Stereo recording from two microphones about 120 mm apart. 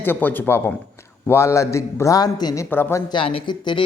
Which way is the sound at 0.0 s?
15° left (ahead or behind).